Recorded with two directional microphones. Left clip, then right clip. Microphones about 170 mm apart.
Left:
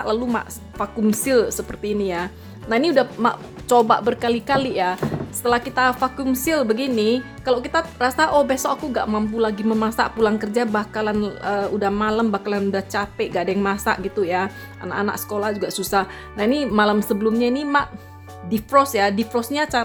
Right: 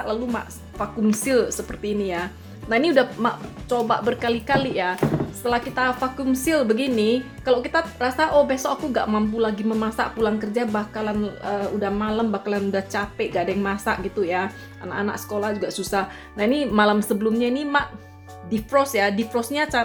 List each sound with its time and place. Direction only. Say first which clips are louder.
0.0 s a woman's voice: left 4 dB; 45° left (ahead or behind)